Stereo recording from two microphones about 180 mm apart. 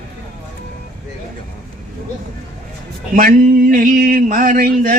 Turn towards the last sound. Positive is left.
turn(degrees=-55)  # may be behind; listen again after turning